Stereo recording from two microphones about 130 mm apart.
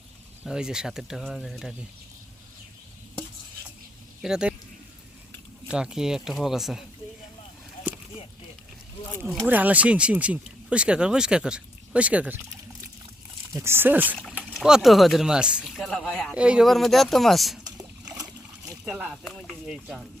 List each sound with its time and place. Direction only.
0.4 s speech: 5° right (ahead or behind)
4.2 s speech: 5° right (ahead or behind)
5.6 s speech: 5° right (ahead or behind)
9.5 s speech: 10° right (ahead or behind)
13.5 s speech: 20° right (ahead or behind); by 16.3 s 5° left (ahead or behind)
16.3 s speech: 10° right (ahead or behind)
17.7 s a sound: 5° right (ahead or behind)
18.2 s splash: 25° right (ahead or behind)
18.9 s speech: centre (ahead or behind)